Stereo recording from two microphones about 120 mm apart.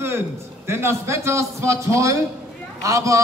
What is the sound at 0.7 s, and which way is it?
A man's voice, 20° right (ahead or behind).